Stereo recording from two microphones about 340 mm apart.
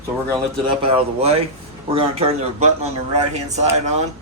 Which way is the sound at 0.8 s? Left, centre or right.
Centre.